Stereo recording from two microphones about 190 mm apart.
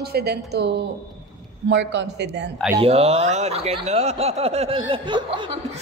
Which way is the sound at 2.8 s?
30° right (ahead or behind).